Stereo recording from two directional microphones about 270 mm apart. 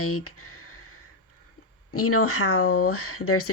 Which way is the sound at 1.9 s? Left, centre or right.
Left.